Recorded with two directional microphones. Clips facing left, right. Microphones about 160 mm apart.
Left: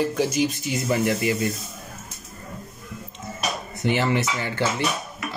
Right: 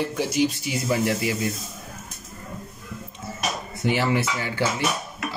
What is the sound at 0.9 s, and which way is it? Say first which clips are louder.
Speech: left 1 dB; 10° right (ahead or behind).